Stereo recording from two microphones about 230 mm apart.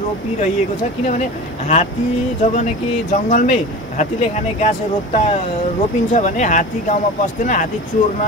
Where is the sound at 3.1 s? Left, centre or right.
Left.